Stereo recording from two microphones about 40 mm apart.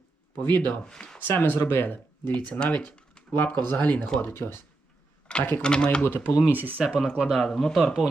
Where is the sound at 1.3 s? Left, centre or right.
Left.